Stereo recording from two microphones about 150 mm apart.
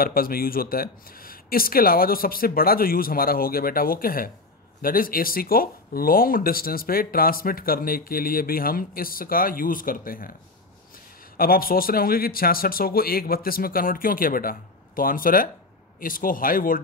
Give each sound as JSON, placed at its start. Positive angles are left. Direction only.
{"t": 0.0, "sound": "speech", "side_deg": 75}
{"t": 11.3, "sound": "speech", "side_deg": 75}